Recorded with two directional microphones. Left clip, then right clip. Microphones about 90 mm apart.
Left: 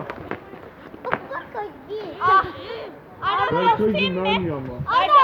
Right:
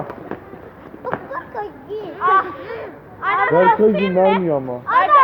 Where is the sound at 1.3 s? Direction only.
15° left (ahead or behind).